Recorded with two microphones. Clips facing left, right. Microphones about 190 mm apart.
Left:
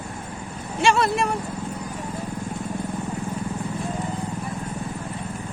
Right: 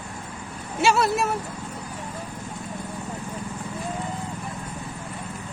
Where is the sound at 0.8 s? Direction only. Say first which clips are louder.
Left 1 dB; 5° right (ahead or behind).